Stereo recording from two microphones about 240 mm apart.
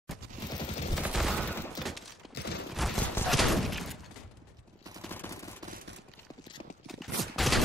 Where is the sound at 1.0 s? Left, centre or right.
Centre.